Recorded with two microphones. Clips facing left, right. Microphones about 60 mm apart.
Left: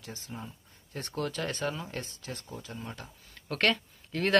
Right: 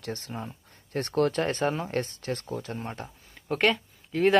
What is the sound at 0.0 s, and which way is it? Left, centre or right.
Speech, right.